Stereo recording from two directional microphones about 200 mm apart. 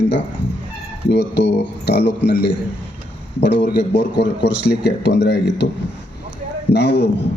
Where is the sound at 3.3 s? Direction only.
55° left (ahead or behind).